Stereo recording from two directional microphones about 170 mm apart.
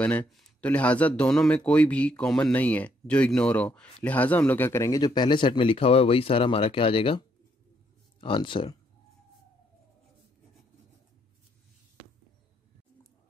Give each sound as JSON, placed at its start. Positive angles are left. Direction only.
{"t": 0.0, "sound": "speech", "side_deg": 5}